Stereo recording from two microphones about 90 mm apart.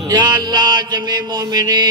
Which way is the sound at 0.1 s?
50° right (ahead or behind).